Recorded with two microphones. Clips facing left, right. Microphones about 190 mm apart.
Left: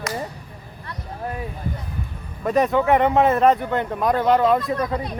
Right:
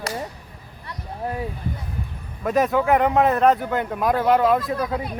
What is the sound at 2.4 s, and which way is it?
A man's voice, centre (ahead or behind).